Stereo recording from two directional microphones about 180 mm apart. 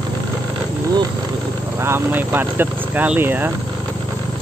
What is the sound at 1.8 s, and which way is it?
Speech, 10° right (ahead or behind).